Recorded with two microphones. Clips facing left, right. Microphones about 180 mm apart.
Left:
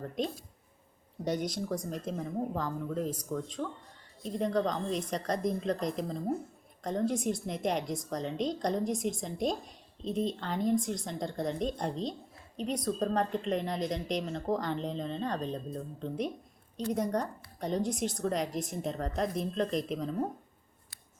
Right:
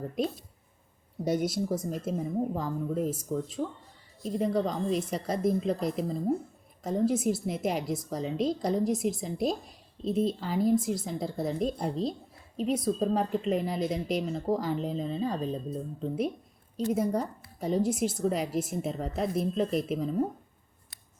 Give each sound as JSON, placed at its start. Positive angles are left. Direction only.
{"t": 1.2, "sound": "a woman's voice", "side_deg": -10}